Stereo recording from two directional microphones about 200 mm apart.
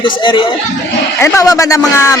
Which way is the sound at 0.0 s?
25° left (ahead or behind).